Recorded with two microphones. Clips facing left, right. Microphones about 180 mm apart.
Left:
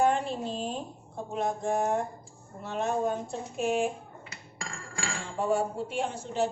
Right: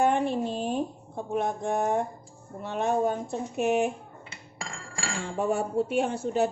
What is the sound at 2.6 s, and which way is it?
A woman's voice, 60° right (ahead or behind).